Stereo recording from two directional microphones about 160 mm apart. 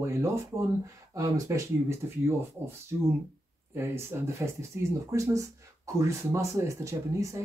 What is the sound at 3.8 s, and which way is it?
Speech, 15° right (ahead or behind).